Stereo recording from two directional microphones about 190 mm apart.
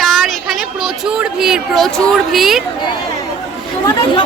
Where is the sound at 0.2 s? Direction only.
Centre (ahead or behind).